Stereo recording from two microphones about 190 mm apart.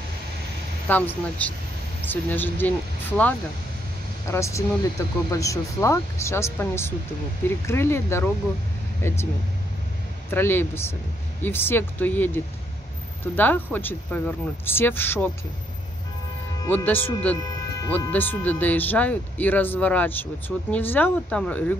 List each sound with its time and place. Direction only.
0.8 s speech: 10° left (ahead or behind)
10.3 s speech: 10° left (ahead or behind)
16.6 s speech: 10° left (ahead or behind)